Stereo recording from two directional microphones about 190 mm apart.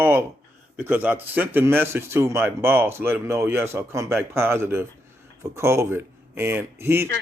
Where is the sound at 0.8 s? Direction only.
10° right (ahead or behind).